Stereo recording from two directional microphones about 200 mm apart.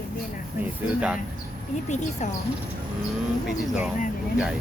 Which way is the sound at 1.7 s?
35° left (ahead or behind).